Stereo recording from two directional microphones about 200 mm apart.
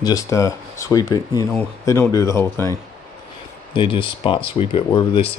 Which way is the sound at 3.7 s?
25° left (ahead or behind).